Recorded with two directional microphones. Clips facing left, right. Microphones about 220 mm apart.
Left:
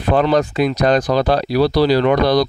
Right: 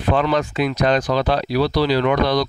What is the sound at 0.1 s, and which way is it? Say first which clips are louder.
Speech: left 4 dB; 40° left (ahead or behind).